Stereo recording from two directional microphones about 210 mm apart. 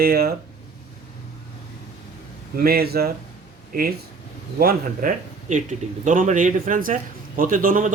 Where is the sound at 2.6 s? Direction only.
45° right (ahead or behind).